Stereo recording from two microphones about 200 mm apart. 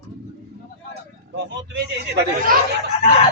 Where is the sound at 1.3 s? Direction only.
60° right (ahead or behind).